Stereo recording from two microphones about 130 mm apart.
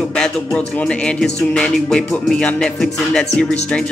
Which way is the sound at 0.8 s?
10° left (ahead or behind).